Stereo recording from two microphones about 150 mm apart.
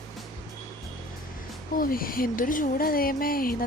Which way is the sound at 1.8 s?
75° left (ahead or behind).